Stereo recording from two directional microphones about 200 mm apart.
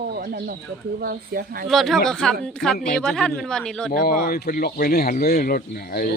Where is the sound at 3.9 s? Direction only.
45° left (ahead or behind).